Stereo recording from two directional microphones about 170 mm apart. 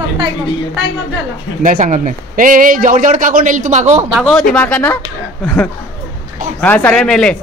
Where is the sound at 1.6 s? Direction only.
50° right (ahead or behind).